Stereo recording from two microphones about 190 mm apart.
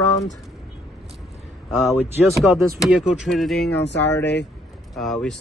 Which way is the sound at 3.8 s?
65° left (ahead or behind).